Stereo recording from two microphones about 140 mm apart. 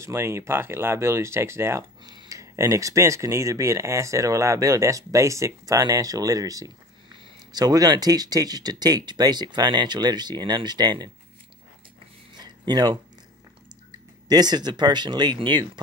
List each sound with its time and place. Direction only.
0.0 s speech: 20° right (ahead or behind)
12.4 s a sound: 30° right (ahead or behind)
14.3 s speech: 30° right (ahead or behind)